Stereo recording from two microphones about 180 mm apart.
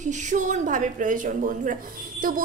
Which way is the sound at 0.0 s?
45° right (ahead or behind).